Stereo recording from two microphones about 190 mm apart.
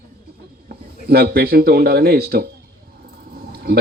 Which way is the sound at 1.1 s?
55° right (ahead or behind).